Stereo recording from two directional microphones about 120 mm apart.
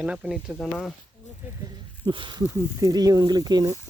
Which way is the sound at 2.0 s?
40° right (ahead or behind).